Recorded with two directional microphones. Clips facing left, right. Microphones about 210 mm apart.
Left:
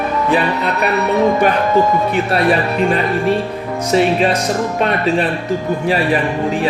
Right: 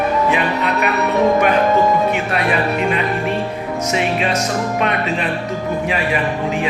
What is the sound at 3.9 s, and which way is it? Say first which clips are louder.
Speech: left 6 dB; 35° left (ahead or behind).